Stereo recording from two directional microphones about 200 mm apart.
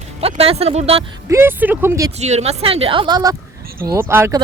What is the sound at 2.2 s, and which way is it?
A woman's voice, 35° right (ahead or behind).